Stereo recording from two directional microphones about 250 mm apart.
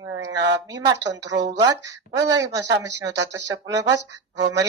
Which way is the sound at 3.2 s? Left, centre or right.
Right.